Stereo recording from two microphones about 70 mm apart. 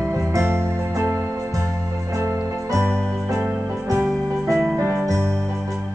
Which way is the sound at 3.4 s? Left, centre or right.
Right.